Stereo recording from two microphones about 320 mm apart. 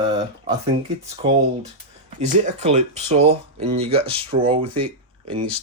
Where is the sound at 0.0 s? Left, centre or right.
Centre.